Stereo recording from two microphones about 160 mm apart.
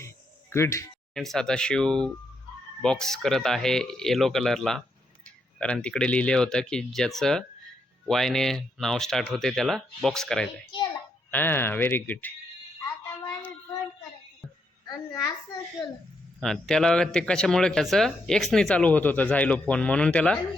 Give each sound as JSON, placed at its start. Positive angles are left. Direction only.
{"t": 0.5, "sound": "speech", "side_deg": 15}
{"t": 1.1, "sound": "speech", "side_deg": 0}
{"t": 12.8, "sound": "a sound", "side_deg": 20}
{"t": 16.4, "sound": "speech", "side_deg": 5}